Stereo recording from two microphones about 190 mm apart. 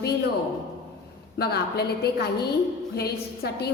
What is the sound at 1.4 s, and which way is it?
A woman's voice, 55° left (ahead or behind).